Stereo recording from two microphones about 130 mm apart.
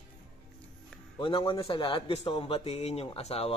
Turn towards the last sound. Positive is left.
turn(degrees=50)  # may be behind; listen again after turning